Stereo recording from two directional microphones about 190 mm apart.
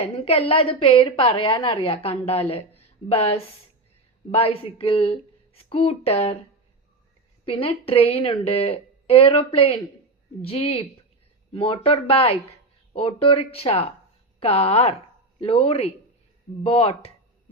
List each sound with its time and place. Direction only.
0.0 s a woman's voice: 30° left (ahead or behind)
7.4 s a woman's voice: 30° left (ahead or behind)